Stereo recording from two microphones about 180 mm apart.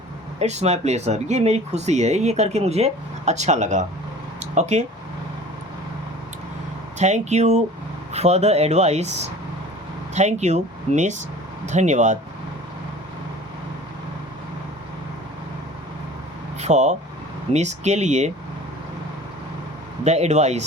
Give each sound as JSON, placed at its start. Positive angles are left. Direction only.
{"t": 0.3, "sound": "speech", "side_deg": -35}
{"t": 7.0, "sound": "speech", "side_deg": -40}
{"t": 16.6, "sound": "speech", "side_deg": -40}
{"t": 20.1, "sound": "speech", "side_deg": -40}